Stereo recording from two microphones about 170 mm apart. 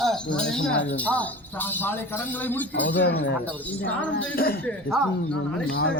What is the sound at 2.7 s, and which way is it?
Speech, 90° left.